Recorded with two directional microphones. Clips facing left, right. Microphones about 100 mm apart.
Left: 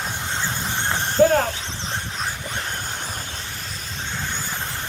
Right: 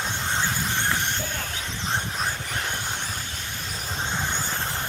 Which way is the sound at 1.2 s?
90° left.